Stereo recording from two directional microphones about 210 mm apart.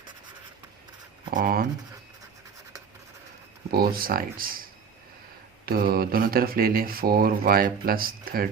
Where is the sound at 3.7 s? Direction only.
45° right (ahead or behind).